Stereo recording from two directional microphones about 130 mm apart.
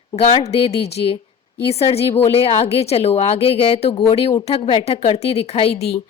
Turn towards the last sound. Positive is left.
turn(degrees=50)  # may be behind; listen again after turning